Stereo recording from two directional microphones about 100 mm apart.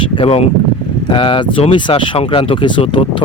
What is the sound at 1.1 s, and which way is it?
Speech, 60° left (ahead or behind).